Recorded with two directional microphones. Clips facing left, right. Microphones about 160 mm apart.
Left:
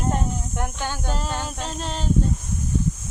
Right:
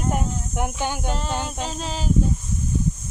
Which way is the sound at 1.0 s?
Centre (ahead or behind).